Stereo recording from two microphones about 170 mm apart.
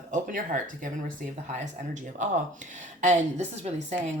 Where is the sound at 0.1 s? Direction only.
50° right (ahead or behind).